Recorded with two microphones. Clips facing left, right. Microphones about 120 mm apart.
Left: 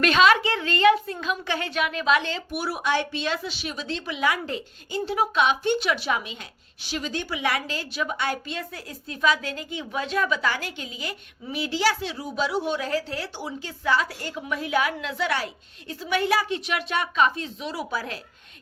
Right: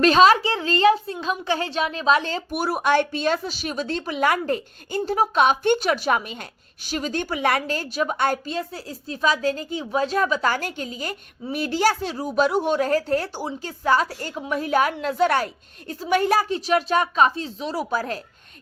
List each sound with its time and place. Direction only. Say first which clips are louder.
0.0 s a woman's voice: right 4 dB; 35° right (ahead or behind)